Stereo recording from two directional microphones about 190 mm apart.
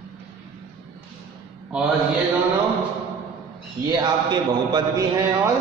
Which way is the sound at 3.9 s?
20° right (ahead or behind).